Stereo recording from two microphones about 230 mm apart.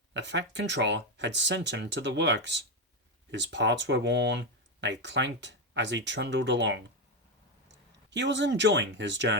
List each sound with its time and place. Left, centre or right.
0.1 s speech: right